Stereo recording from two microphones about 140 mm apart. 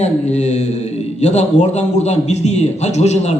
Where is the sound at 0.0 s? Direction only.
55° left (ahead or behind).